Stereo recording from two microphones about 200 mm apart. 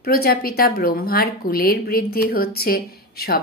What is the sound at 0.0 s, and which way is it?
Speech, 50° left (ahead or behind).